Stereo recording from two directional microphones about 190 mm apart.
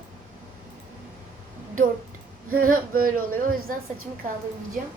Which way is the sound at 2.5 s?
45° right (ahead or behind).